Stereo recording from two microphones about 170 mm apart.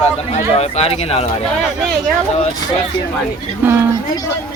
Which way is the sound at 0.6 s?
35° left (ahead or behind).